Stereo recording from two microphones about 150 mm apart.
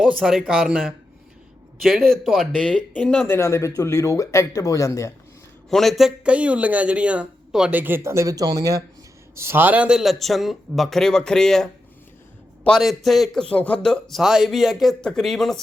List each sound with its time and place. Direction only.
0.0 s a man's voice: 5° right (ahead or behind)
2.2 s a man's voice: centre (ahead or behind)
3.2 s speech: 15° left (ahead or behind)
5.7 s a man's voice: centre (ahead or behind)